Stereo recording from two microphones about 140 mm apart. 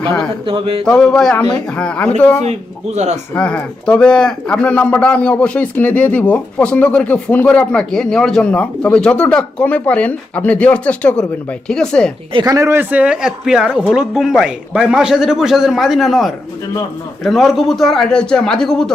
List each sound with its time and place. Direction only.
0.4 s speech: 40° right (ahead or behind)
0.9 s speech: 5° left (ahead or behind)
2.9 s speech: 55° right (ahead or behind)
3.3 s speech: 10° left (ahead or behind)
12.3 s speech: 30° right (ahead or behind); by 18.9 s 5° left (ahead or behind)